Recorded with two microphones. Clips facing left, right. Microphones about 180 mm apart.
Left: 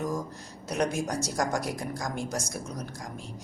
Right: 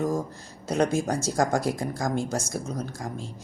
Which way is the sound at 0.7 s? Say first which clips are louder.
Right 5 dB; 30° right (ahead or behind).